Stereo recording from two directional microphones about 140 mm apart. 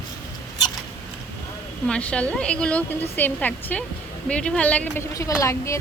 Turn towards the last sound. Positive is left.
turn(degrees=20)  # may be behind; listen again after turning